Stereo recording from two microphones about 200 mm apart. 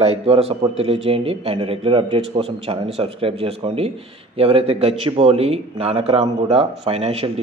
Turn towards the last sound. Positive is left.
turn(degrees=-30)  # may be behind; listen again after turning